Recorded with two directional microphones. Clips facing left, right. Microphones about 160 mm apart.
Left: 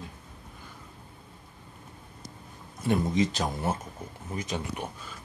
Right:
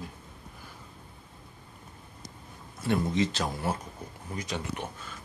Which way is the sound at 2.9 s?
15° left (ahead or behind).